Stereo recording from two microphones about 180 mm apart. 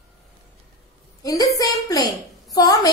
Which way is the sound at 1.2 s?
20° left (ahead or behind).